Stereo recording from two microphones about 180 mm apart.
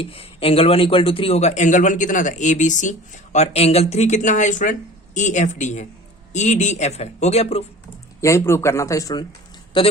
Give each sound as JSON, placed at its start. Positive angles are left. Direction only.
{"t": 0.0, "sound": "a man's voice", "side_deg": 30}
{"t": 8.2, "sound": "speech", "side_deg": 15}